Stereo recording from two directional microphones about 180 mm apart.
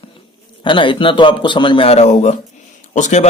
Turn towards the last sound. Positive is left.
turn(degrees=40)  # may be behind; listen again after turning